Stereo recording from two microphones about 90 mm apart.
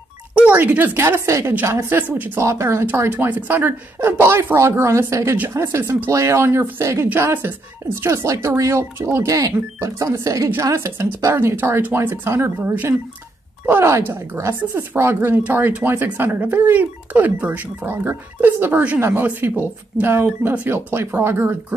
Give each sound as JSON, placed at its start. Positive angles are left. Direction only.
{"t": 0.3, "sound": "speech", "side_deg": -15}
{"t": 2.4, "sound": "speech", "side_deg": -30}
{"t": 18.9, "sound": "speech", "side_deg": -30}